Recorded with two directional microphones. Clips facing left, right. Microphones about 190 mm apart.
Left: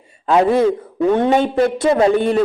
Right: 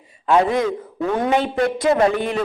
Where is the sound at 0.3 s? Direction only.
30° left (ahead or behind).